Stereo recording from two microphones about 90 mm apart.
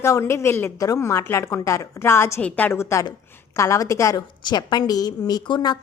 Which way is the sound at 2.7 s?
30° left (ahead or behind).